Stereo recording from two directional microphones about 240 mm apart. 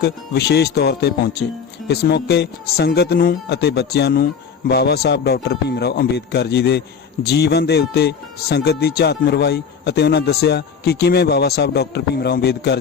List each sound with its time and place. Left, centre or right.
0.0 s speech: left